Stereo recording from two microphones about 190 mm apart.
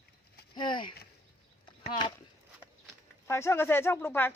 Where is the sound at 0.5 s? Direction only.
25° left (ahead or behind).